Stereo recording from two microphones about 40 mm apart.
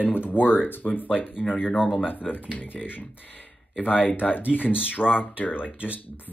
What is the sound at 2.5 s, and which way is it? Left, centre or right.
Speech, left.